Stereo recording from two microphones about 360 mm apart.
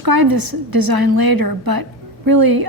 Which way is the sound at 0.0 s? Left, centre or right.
Right.